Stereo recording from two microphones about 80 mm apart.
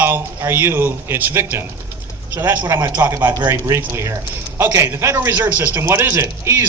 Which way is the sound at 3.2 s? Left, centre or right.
Right.